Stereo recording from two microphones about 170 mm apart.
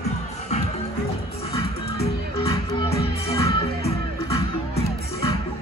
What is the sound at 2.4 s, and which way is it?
Music, 35° left (ahead or behind).